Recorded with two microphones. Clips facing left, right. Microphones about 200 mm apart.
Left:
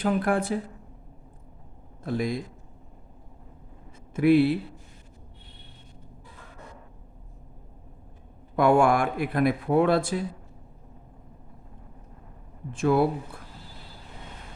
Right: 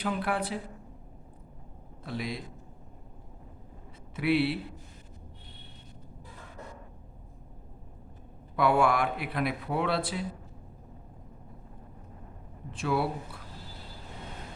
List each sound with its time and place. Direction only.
0.0 s speech: 50° left (ahead or behind)
2.0 s speech: 45° left (ahead or behind)
4.1 s speech: 45° left (ahead or behind)
8.5 s speech: 45° left (ahead or behind)
12.7 s speech: 50° left (ahead or behind)